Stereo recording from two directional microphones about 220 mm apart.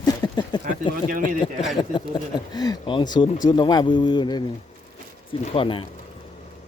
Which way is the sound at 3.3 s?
35° left (ahead or behind).